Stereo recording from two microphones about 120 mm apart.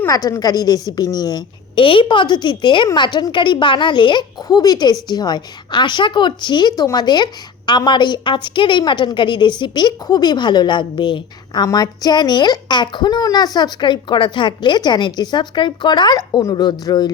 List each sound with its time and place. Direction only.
0.1 s a woman's voice: 30° left (ahead or behind)